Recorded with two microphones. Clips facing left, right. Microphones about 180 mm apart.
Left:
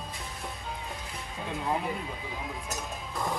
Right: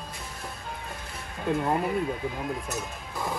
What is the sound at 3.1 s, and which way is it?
Music, centre (ahead or behind).